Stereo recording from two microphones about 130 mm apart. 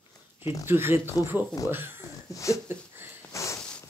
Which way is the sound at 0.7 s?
15° right (ahead or behind).